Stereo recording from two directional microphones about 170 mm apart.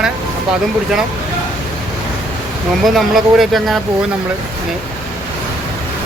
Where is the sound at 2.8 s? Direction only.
Centre (ahead or behind).